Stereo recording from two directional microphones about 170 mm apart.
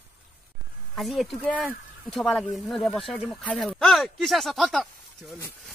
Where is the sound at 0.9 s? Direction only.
Centre (ahead or behind).